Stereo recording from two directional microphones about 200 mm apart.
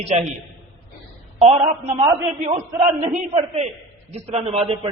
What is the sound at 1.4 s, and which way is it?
A man's voice, 35° right (ahead or behind).